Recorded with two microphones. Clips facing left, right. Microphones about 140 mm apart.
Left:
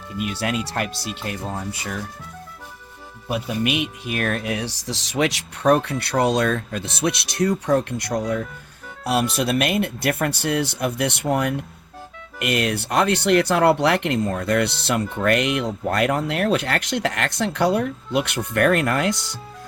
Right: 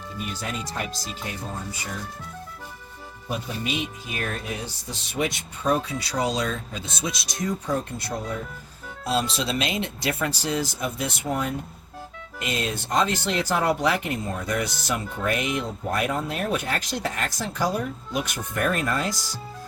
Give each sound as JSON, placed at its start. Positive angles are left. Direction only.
{"t": 0.3, "sound": "speech", "side_deg": 75}
{"t": 3.2, "sound": "speech", "side_deg": 70}
{"t": 9.0, "sound": "speech", "side_deg": 65}